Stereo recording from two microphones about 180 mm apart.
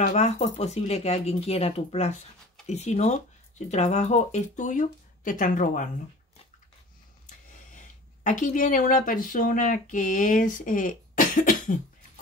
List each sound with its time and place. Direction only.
0.0 s speech: 40° left (ahead or behind)
7.2 s speech: 45° left (ahead or behind)